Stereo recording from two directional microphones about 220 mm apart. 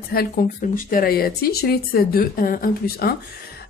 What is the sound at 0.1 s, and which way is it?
Speech, 40° left (ahead or behind).